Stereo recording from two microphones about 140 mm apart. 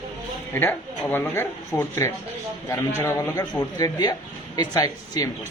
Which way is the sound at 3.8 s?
30° left (ahead or behind).